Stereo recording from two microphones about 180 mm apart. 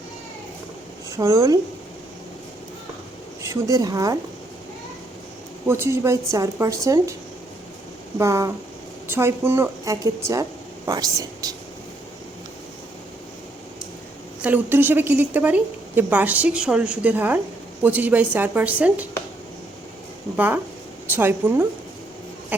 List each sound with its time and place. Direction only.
1.1 s a woman's voice: 15° right (ahead or behind)
3.4 s speech: 15° right (ahead or behind)
5.6 s a woman's voice: 15° right (ahead or behind)
8.2 s a woman's voice: 15° right (ahead or behind)
14.4 s a woman's voice: 10° right (ahead or behind)
20.3 s a woman's voice: 10° right (ahead or behind)